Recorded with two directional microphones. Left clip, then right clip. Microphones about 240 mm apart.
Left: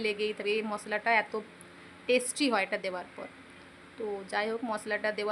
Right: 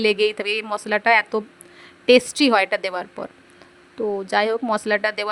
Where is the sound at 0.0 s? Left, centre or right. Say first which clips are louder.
Right 12 dB; right.